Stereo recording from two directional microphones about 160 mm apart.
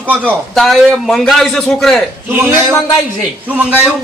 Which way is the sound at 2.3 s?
15° right (ahead or behind).